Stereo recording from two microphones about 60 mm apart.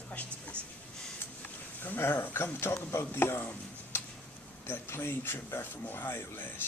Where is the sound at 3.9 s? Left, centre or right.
Left.